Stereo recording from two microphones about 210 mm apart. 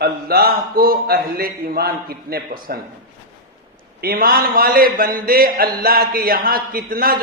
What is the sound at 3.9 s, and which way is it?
A man's voice, 45° right (ahead or behind).